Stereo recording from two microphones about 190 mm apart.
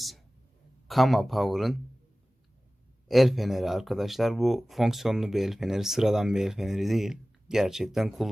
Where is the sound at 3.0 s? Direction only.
Centre (ahead or behind).